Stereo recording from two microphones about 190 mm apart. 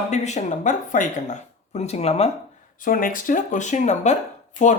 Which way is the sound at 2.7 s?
45° left (ahead or behind).